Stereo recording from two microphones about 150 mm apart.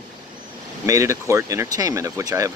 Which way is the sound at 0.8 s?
20° right (ahead or behind).